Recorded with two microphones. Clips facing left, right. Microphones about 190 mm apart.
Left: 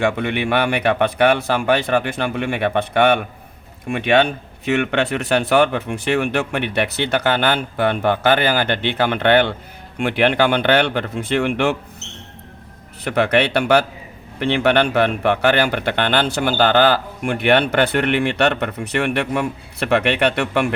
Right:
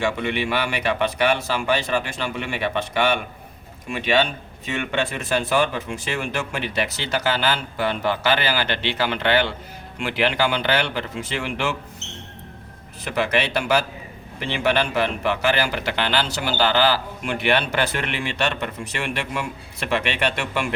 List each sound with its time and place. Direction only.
0.0 s speech: 55° left (ahead or behind)
13.1 s speech: 60° left (ahead or behind)